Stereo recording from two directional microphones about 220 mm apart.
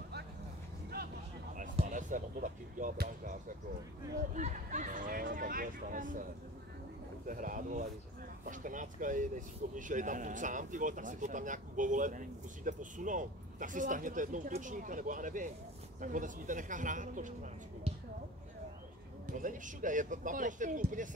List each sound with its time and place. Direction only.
1.5 s speech: 35° right (ahead or behind)
7.2 s speech: 35° right (ahead or behind)
19.3 s speech: 35° right (ahead or behind)